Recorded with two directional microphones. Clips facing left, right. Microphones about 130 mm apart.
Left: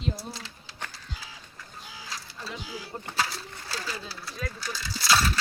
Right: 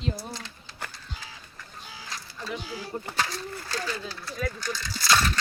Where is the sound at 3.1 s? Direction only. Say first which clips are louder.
Left 1 dB; 5° left (ahead or behind).